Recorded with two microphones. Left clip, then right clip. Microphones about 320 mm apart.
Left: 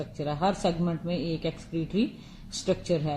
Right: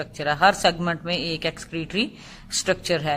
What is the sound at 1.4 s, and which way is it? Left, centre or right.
Speech, right.